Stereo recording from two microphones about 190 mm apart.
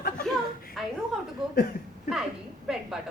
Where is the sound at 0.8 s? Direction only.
Centre (ahead or behind).